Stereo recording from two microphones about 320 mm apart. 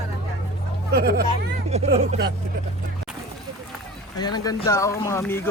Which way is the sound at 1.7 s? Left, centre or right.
Right.